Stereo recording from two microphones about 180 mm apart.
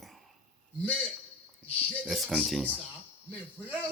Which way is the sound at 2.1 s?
Centre (ahead or behind).